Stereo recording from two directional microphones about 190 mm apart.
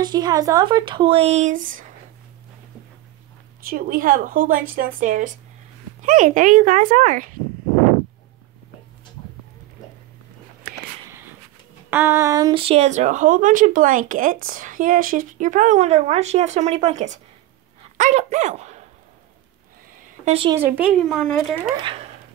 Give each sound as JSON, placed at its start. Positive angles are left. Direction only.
{"t": 0.0, "sound": "speech", "side_deg": -20}
{"t": 3.6, "sound": "a woman's voice", "side_deg": -45}
{"t": 10.6, "sound": "a sound", "side_deg": -50}
{"t": 11.9, "sound": "a woman's voice", "side_deg": -10}
{"t": 20.2, "sound": "speech", "side_deg": -30}
{"t": 20.5, "sound": "speech", "side_deg": -10}
{"t": 21.1, "sound": "speech", "side_deg": 5}